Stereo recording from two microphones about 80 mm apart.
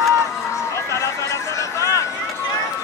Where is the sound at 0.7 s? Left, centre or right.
Left.